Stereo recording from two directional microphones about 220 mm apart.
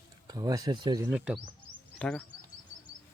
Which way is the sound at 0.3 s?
15° right (ahead or behind).